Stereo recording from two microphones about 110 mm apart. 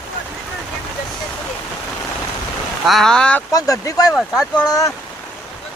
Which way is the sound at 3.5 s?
30° left (ahead or behind).